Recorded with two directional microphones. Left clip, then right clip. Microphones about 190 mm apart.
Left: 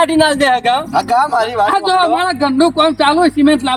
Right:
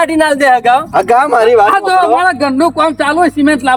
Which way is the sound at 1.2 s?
40° right (ahead or behind).